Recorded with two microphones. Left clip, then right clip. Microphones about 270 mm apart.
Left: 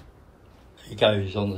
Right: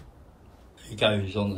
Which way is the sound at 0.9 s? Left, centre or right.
Centre.